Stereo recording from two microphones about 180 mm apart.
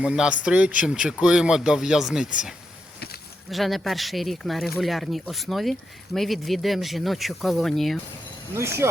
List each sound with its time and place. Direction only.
0.0 s speech: 5° right (ahead or behind)
3.5 s speech: centre (ahead or behind)
8.5 s speech: 15° right (ahead or behind)